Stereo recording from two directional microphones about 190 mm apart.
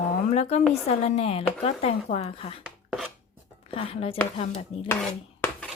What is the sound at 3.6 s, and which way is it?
Speech, 30° left (ahead or behind).